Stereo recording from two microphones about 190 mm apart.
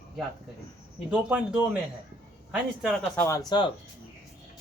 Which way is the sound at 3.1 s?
15° left (ahead or behind).